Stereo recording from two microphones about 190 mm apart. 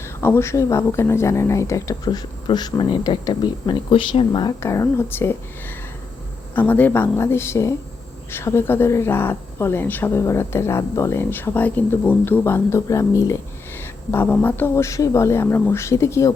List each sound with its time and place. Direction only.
0.0 s speech: 15° left (ahead or behind)